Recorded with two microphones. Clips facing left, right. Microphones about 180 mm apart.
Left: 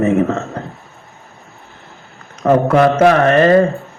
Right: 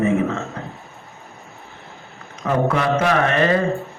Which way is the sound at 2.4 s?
45° left (ahead or behind).